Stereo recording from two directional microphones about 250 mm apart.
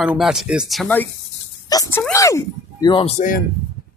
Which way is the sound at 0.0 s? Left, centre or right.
Centre.